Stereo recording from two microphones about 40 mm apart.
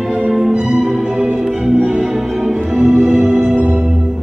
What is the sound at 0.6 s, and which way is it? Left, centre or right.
Music, centre.